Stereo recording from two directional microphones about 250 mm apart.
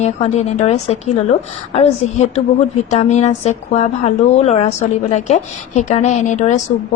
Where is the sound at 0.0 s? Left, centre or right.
Left.